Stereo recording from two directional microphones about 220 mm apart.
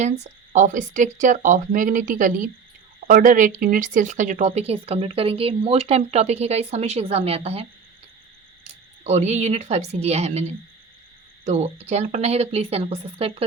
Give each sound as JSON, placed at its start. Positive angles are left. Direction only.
{"t": 0.0, "sound": "speech", "side_deg": -30}
{"t": 9.0, "sound": "speech", "side_deg": -30}